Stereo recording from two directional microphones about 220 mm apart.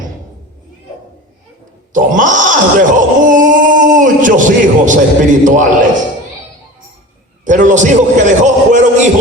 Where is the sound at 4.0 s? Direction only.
35° right (ahead or behind).